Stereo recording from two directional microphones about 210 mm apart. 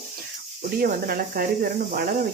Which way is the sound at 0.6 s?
45° right (ahead or behind).